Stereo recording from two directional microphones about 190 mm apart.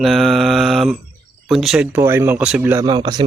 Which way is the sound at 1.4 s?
Centre (ahead or behind).